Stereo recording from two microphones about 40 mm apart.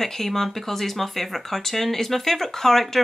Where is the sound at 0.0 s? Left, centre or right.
Centre.